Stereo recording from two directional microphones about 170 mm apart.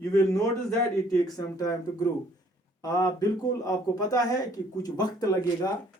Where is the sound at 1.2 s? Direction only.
20° left (ahead or behind).